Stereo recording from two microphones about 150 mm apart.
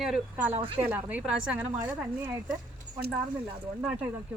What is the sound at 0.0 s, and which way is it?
A woman's voice, 5° right (ahead or behind).